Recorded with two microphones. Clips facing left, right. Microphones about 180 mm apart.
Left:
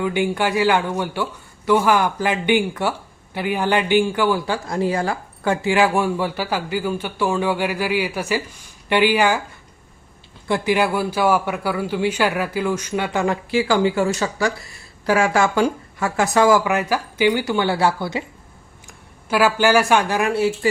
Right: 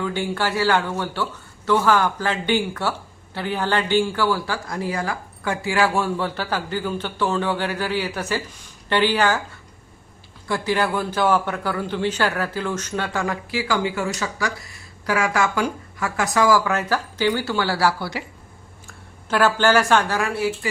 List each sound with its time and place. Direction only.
0.0 s speech: 15° left (ahead or behind)
10.5 s speech: 15° left (ahead or behind)
13.2 s speech: 25° left (ahead or behind)
18.9 s speech: 10° left (ahead or behind); by 20.7 s 25° left (ahead or behind)